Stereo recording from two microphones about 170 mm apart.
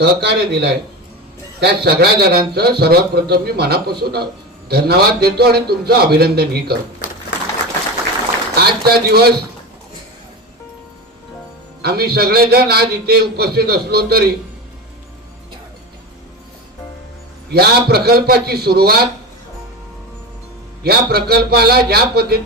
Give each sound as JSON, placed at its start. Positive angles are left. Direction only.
{"t": 0.0, "sound": "a man's voice", "side_deg": -75}
{"t": 8.5, "sound": "speech", "side_deg": -65}
{"t": 11.8, "sound": "a man's voice", "side_deg": -65}
{"t": 17.5, "sound": "a man's voice", "side_deg": -70}
{"t": 20.8, "sound": "a man's voice", "side_deg": -65}